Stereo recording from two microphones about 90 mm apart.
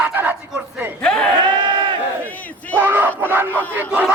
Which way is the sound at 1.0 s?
10° left (ahead or behind).